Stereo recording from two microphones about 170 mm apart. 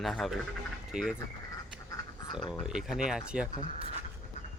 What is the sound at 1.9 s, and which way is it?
Duck, 25° left (ahead or behind).